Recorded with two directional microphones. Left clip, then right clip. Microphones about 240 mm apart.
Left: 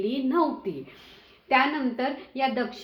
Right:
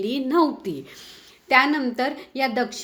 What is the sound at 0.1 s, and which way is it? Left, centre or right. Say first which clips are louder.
Speech: right 7 dB; right.